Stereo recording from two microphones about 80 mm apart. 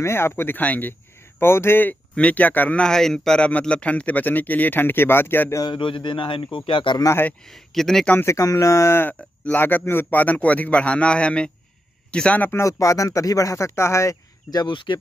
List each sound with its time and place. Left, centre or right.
0.0 s speech: left
5.7 s a man's voice: left
7.4 s speech: centre
8.3 s speech: left
9.1 s a man's voice: left
12.5 s speech: left
14.5 s speech: left